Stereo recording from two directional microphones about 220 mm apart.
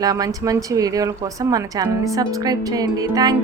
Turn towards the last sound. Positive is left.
turn(degrees=-15)  # may be behind; listen again after turning